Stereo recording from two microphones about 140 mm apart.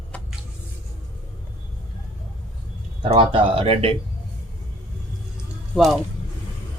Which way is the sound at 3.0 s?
40° right (ahead or behind).